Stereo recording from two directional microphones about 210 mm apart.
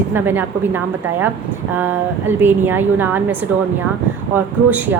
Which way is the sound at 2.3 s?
10° right (ahead or behind).